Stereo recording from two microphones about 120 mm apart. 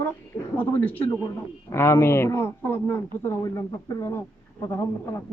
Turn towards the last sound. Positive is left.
turn(degrees=25)  # may be behind; listen again after turning